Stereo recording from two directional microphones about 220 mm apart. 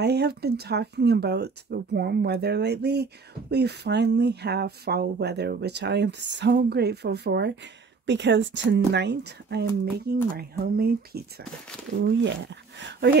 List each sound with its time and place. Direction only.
0.0 s speech: 50° right (ahead or behind)